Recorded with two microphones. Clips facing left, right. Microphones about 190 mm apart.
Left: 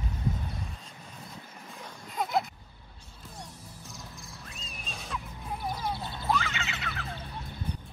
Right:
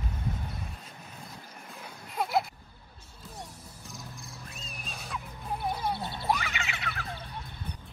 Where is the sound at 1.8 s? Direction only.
5° right (ahead or behind).